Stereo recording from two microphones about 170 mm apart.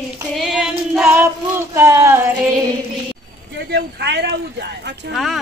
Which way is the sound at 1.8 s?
15° right (ahead or behind).